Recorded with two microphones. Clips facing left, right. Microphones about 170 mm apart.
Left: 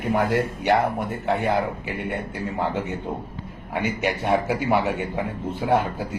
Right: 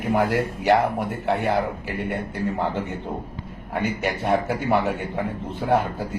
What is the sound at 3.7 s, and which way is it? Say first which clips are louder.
A man's voice: even; 5° left (ahead or behind).